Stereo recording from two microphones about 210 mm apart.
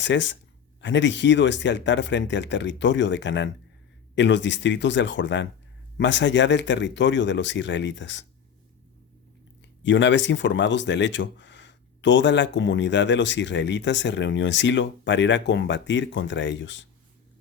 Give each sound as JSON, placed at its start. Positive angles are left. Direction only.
{"t": 0.0, "sound": "speech", "side_deg": 60}
{"t": 9.6, "sound": "speech", "side_deg": 60}